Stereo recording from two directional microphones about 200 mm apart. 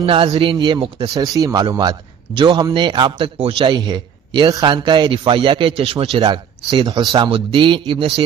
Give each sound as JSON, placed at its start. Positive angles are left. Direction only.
{"t": 0.0, "sound": "a man's voice", "side_deg": -25}